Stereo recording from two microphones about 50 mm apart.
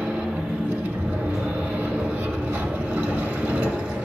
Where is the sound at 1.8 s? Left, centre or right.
Right.